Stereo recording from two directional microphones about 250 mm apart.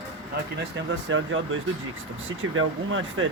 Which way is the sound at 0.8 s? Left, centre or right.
Right.